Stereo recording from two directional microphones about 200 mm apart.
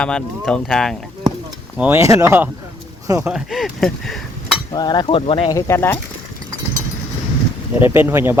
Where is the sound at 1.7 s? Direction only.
10° right (ahead or behind).